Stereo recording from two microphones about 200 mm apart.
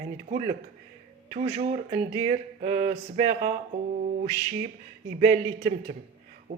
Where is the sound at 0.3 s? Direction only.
35° right (ahead or behind).